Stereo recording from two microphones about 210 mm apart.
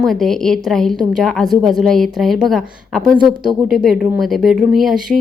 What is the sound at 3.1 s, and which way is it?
Speech, 20° right (ahead or behind).